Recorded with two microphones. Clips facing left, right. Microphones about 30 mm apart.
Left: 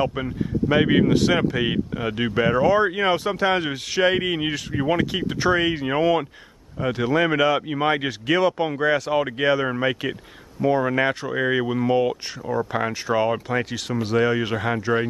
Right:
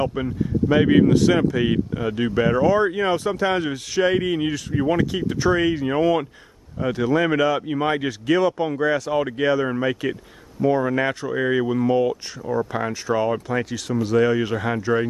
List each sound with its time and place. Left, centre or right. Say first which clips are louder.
0.0 s speech: right 1 dB; centre